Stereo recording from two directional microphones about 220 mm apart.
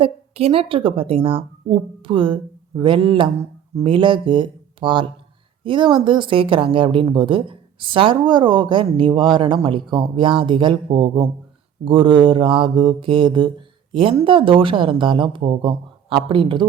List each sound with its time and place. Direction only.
0.0 s mantra: 25° right (ahead or behind)